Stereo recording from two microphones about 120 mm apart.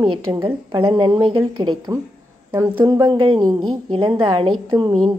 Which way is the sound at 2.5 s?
30° right (ahead or behind).